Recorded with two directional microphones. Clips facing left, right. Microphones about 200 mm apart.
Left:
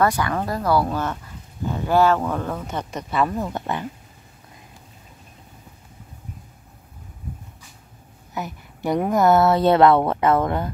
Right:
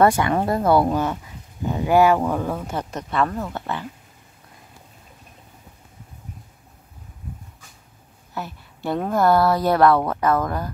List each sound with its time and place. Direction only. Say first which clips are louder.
0.0 s speech: right 4 dB; 25° right (ahead or behind); by 3.8 s 15° left (ahead or behind)
8.4 s a woman's voice: left 2 dB; 15° left (ahead or behind)